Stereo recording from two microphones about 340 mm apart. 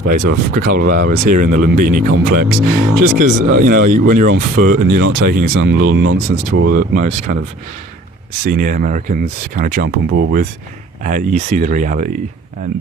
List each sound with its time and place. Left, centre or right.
0.1 s speech: right
8.4 s speech: right